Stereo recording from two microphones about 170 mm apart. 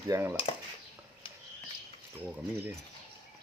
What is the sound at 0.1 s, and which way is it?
Speech, 15° right (ahead or behind).